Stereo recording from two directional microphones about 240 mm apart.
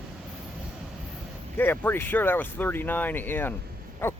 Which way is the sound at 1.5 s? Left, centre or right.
Centre.